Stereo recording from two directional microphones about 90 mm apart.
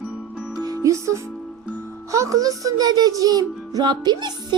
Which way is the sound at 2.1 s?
35° right (ahead or behind).